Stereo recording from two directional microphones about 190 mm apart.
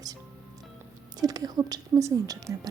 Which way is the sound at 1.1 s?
20° right (ahead or behind).